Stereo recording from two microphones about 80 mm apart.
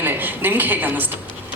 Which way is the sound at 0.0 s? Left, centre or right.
Right.